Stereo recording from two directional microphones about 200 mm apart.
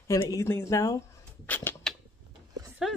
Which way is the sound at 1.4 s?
10° left (ahead or behind).